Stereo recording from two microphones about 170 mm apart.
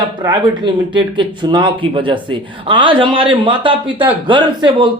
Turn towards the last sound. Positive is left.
turn(degrees=-30)  # may be behind; listen again after turning